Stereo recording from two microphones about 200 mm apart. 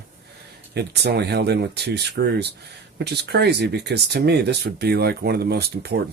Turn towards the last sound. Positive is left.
turn(degrees=-55)  # may be behind; listen again after turning